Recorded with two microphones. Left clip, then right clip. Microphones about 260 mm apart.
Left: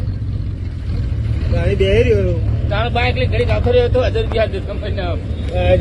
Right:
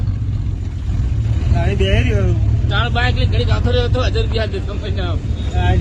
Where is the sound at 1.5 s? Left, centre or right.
Right.